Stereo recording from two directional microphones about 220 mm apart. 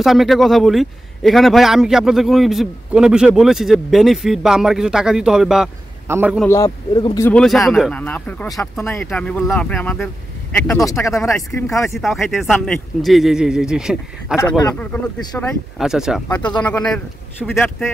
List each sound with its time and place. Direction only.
0.0 s speech: centre (ahead or behind)
6.4 s a man's voice: 15° left (ahead or behind)
7.2 s a man's voice: 5° left (ahead or behind)
11.9 s speech: centre (ahead or behind)
14.3 s a man's voice: 10° left (ahead or behind)